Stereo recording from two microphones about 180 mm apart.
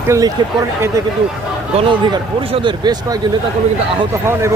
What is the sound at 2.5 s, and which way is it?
Speech, 25° right (ahead or behind).